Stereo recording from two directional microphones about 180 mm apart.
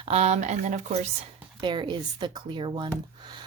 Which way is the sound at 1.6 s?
25° right (ahead or behind).